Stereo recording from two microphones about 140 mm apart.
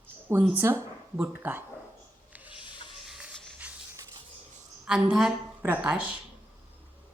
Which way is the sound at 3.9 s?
25° right (ahead or behind).